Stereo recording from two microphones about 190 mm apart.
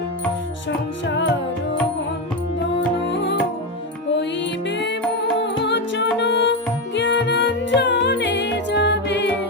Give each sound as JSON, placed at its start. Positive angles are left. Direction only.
{"t": 1.0, "sound": "music", "side_deg": 70}
{"t": 5.4, "sound": "music", "side_deg": 65}